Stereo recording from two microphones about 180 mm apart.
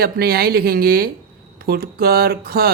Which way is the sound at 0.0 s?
55° right (ahead or behind).